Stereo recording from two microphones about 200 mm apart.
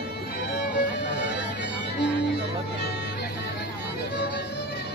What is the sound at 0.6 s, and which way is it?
Music, 60° left (ahead or behind).